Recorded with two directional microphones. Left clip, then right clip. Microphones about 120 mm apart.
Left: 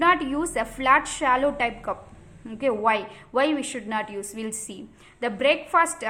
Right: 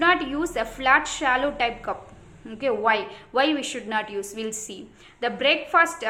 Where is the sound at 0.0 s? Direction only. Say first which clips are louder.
Even; 35° left (ahead or behind).